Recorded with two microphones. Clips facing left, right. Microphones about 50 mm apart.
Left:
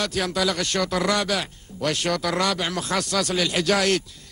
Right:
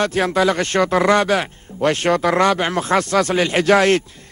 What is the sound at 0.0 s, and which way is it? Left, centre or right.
A man's voice, right.